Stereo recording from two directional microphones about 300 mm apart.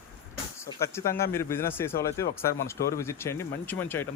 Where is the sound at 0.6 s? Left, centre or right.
Centre.